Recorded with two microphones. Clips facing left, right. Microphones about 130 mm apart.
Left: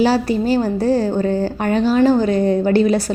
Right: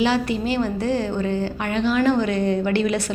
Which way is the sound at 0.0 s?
40° left (ahead or behind).